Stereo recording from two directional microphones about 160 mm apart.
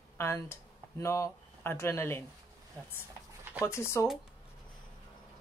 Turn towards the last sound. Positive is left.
turn(degrees=15)  # may be behind; listen again after turning